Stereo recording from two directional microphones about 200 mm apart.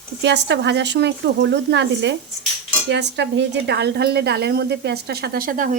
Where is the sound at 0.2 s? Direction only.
60° right (ahead or behind).